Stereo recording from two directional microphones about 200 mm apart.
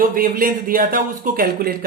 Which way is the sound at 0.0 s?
45° right (ahead or behind).